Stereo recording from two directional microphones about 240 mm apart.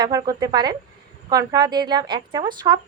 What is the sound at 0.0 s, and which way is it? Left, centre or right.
Speech, centre.